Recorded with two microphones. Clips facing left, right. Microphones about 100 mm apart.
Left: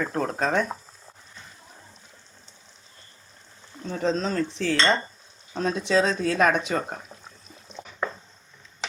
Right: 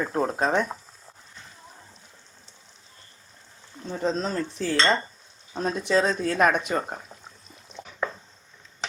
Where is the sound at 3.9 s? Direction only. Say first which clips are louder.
Left 1 dB; 5° right (ahead or behind).